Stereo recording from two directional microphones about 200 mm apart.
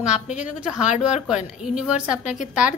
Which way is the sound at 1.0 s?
5° right (ahead or behind).